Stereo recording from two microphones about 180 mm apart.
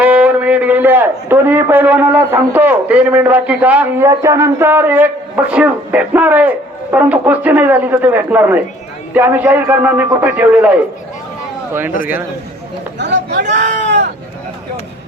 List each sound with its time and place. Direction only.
0.0 s a man's voice: 10° right (ahead or behind)
13.0 s speech: 75° right (ahead or behind)
13.8 s sheep: 75° right (ahead or behind)